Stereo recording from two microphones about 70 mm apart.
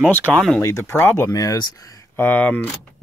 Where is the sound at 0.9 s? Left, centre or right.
Left.